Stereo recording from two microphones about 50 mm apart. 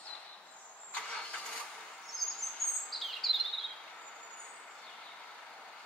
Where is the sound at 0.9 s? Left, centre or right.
Centre.